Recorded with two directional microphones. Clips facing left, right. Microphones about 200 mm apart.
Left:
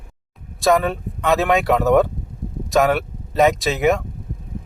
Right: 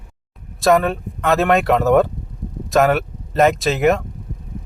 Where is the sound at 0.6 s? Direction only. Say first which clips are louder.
Right 2 dB; centre (ahead or behind).